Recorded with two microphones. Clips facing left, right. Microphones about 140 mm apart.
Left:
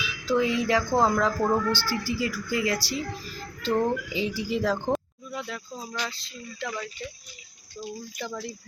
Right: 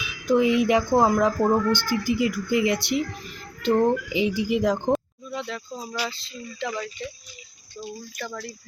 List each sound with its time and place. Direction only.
0.1 s a woman's voice: 20° right (ahead or behind)
4.9 s a sound: centre (ahead or behind)
5.8 s speech: 10° right (ahead or behind)
8.2 s speech: 20° left (ahead or behind)